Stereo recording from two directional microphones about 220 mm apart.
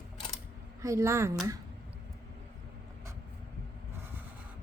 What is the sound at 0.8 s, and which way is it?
Speech, 15° right (ahead or behind).